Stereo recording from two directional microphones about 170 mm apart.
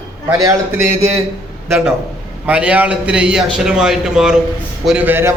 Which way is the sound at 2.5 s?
10° right (ahead or behind).